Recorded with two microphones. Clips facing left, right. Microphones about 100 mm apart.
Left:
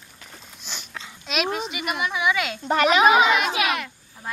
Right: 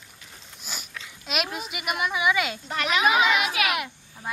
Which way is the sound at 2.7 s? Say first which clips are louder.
Left 12 dB; 50° left (ahead or behind).